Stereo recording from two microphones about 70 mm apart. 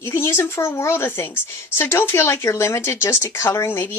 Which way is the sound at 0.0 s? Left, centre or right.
Left.